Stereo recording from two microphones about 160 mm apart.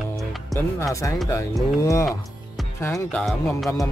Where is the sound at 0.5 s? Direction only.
20° left (ahead or behind).